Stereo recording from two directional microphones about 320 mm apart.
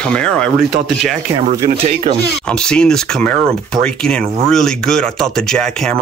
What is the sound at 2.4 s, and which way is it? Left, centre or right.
Speech, centre.